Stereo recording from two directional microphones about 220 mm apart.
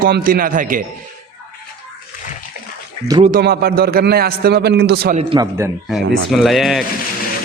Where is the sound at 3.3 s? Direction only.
45° right (ahead or behind).